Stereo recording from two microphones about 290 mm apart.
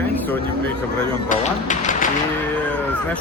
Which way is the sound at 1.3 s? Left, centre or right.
Left.